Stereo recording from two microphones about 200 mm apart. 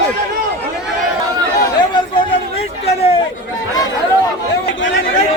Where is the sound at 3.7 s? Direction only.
20° left (ahead or behind).